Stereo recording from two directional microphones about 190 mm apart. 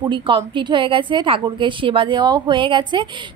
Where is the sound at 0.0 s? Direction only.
25° right (ahead or behind).